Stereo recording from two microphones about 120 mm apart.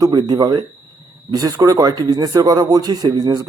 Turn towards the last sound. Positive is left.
turn(degrees=-30)  # may be behind; listen again after turning